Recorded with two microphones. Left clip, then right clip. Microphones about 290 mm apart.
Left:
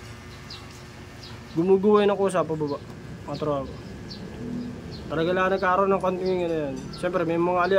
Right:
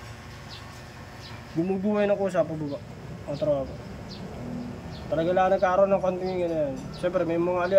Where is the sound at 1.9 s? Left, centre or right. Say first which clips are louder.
Left 4 dB; centre.